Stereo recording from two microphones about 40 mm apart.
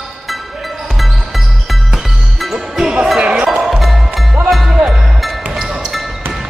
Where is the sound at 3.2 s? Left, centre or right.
Right.